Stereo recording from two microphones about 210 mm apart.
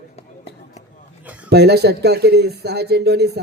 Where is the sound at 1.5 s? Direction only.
50° right (ahead or behind).